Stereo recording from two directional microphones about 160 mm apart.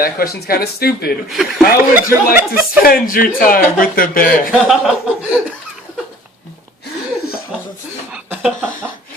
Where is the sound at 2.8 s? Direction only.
65° left (ahead or behind).